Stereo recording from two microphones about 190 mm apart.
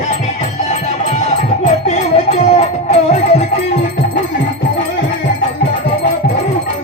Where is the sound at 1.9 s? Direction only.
35° left (ahead or behind).